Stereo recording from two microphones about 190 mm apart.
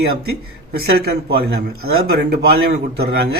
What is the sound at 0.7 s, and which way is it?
A man's voice, 55° right (ahead or behind).